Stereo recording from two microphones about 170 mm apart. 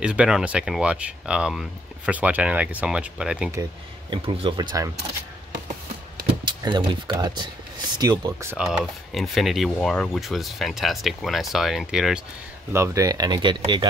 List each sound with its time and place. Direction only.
0.0 s speech: 5° right (ahead or behind)
4.1 s speech: 30° right (ahead or behind)
6.4 s speech: 25° right (ahead or behind)
8.5 s speech: 5° right (ahead or behind)
12.7 s speech: 15° right (ahead or behind)